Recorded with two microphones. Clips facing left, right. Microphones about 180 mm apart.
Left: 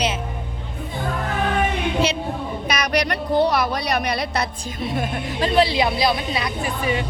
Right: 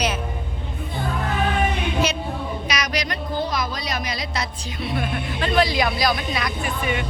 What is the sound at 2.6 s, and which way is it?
Speech, 55° left (ahead or behind).